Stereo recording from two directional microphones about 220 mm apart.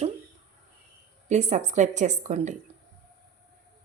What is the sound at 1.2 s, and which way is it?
A woman's voice, 30° right (ahead or behind).